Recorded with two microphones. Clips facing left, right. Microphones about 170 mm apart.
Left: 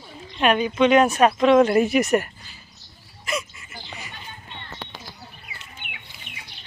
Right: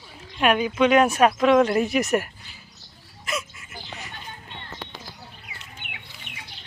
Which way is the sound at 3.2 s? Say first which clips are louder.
Left 2 dB; centre (ahead or behind).